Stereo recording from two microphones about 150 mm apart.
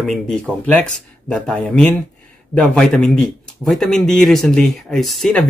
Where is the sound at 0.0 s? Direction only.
5° left (ahead or behind).